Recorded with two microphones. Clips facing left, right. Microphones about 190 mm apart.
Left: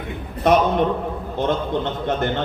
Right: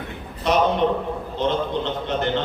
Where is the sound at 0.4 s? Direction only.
55° left (ahead or behind).